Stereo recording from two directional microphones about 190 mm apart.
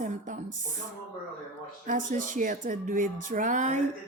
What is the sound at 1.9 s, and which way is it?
Speech, 40° right (ahead or behind).